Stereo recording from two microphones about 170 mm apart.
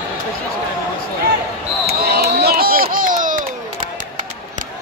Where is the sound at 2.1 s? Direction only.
65° right (ahead or behind); by 3.4 s 50° right (ahead or behind).